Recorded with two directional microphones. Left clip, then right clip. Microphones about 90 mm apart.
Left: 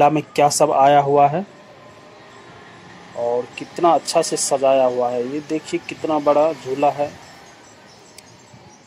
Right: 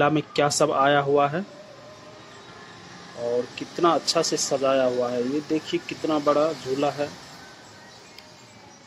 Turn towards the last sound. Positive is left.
turn(degrees=25)  # may be behind; listen again after turning